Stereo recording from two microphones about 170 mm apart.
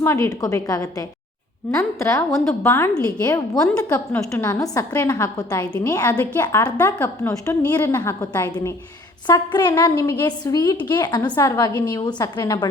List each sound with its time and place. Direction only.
0.0 s a woman's voice: 15° left (ahead or behind)
2.3 s a woman's voice: centre (ahead or behind)
2.6 s a woman's voice: 15° left (ahead or behind)
6.7 s a woman's voice: 10° left (ahead or behind)